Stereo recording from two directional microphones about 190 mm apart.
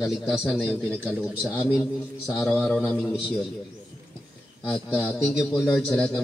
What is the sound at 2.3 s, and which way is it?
Speech, 5° left (ahead or behind).